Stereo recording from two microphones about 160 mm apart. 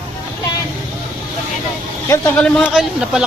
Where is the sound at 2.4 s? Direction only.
5° left (ahead or behind).